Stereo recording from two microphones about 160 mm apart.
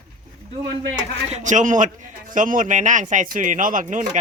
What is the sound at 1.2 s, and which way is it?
Speech, 45° right (ahead or behind).